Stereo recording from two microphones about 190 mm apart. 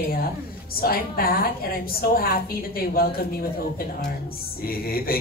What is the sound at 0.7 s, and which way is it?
Speech, 50° left (ahead or behind).